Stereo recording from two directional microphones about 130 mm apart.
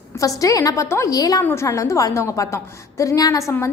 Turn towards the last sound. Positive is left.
turn(degrees=25)  # may be behind; listen again after turning